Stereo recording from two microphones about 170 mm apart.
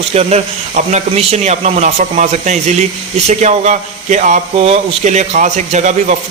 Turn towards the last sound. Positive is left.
turn(degrees=-45)  # may be behind; listen again after turning